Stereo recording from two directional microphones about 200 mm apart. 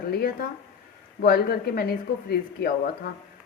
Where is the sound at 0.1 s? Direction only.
50° left (ahead or behind).